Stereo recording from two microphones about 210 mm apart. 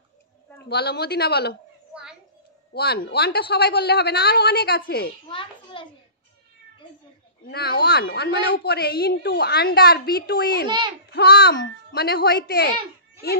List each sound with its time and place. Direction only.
0.7 s a woman's voice: 50° left (ahead or behind)
2.7 s a woman's voice: 50° left (ahead or behind)
5.3 s children playing: 25° left (ahead or behind)
7.4 s a woman's voice: 50° left (ahead or behind)